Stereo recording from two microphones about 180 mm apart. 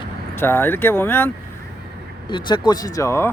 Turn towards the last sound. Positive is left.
turn(degrees=15)  # may be behind; listen again after turning